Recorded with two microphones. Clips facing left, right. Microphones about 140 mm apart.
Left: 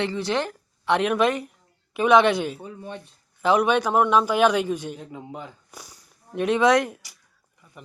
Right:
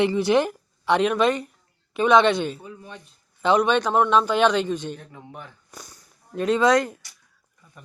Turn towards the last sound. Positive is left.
turn(degrees=5)  # may be behind; listen again after turning